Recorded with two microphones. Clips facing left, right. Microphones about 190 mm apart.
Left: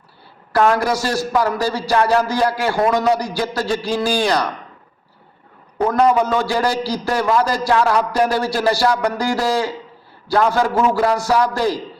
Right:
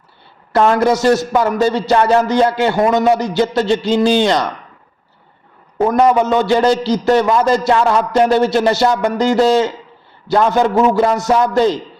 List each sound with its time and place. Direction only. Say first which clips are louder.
0.5 s a man's voice: right 4 dB; 25° right (ahead or behind)
5.8 s a man's voice: right 3 dB; 20° right (ahead or behind)